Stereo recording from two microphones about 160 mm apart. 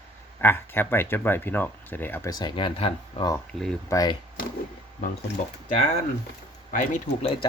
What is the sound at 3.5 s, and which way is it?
Speech, 35° right (ahead or behind).